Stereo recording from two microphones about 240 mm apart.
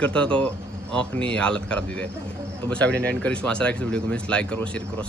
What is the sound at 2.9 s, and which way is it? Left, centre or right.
Speech, right.